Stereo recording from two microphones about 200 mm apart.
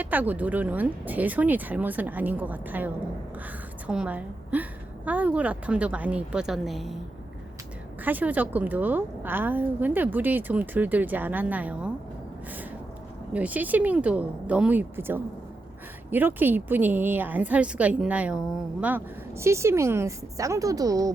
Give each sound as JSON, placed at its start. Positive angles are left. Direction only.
{"t": 0.0, "sound": "a woman's voice", "side_deg": -10}
{"t": 8.0, "sound": "a woman's voice", "side_deg": -10}
{"t": 13.3, "sound": "a woman's voice", "side_deg": -5}